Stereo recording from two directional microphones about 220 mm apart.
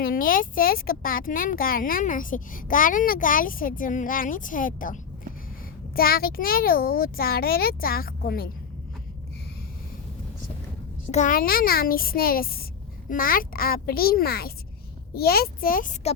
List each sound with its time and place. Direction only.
0.0 s a child's voice: 40° left (ahead or behind)
11.1 s a child's voice: 35° left (ahead or behind)